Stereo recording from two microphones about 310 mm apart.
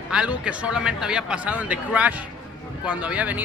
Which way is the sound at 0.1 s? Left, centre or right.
Centre.